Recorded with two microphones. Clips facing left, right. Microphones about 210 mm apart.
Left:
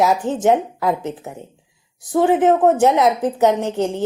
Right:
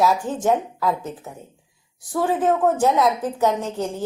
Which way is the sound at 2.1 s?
20° left (ahead or behind).